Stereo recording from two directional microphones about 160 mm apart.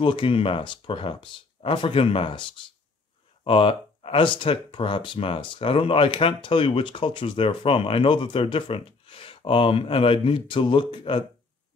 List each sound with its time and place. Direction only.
0.0 s speech: 35° left (ahead or behind)